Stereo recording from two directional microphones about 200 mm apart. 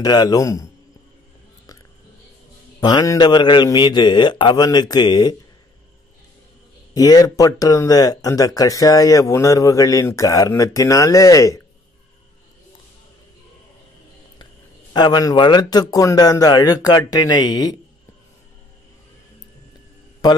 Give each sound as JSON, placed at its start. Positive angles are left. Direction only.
{"t": 0.0, "sound": "a man's voice", "side_deg": 20}
{"t": 2.8, "sound": "a man's voice", "side_deg": 20}
{"t": 6.9, "sound": "speech", "side_deg": 20}
{"t": 14.4, "sound": "a man's voice", "side_deg": 20}